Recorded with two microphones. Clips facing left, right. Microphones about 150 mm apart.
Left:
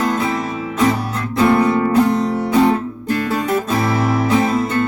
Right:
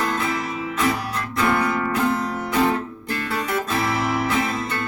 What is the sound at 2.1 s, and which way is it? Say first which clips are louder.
Music: left 7 dB; 20° left (ahead or behind).